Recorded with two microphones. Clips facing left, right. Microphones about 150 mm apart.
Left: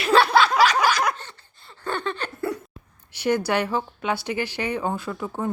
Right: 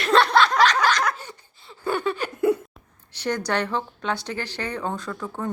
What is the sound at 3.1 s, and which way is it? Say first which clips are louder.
A woman's voice: left 3 dB; 10° left (ahead or behind).